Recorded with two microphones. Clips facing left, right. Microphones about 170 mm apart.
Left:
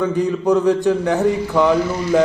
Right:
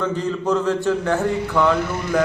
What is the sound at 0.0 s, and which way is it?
A man's voice, 15° left (ahead or behind).